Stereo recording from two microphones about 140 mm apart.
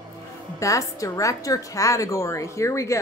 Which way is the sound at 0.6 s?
20° left (ahead or behind).